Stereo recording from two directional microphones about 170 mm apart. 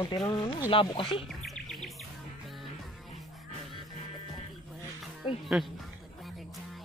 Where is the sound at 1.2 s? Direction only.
Centre (ahead or behind).